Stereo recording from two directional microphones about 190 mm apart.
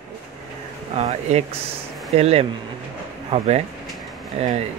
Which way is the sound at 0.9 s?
35° right (ahead or behind).